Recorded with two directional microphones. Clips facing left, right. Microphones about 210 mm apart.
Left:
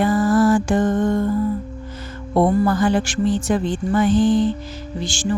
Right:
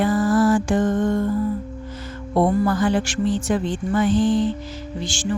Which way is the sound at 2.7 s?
40° left (ahead or behind).